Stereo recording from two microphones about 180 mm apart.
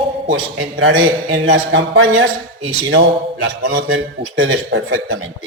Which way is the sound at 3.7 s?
90° right.